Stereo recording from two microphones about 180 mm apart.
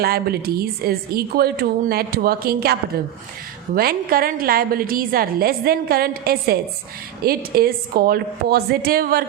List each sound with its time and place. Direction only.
0.0 s a woman's voice: 60° right (ahead or behind)
3.8 s a woman's voice: 55° right (ahead or behind)